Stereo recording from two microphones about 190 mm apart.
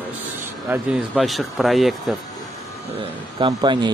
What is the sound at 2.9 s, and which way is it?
Speech, 25° right (ahead or behind).